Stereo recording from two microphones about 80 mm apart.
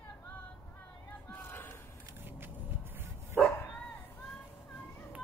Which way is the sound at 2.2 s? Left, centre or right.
Right.